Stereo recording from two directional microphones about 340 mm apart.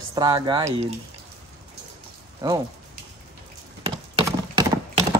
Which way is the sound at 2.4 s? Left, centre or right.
Centre.